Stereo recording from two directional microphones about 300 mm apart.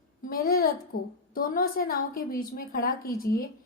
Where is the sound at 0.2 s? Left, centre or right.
Left.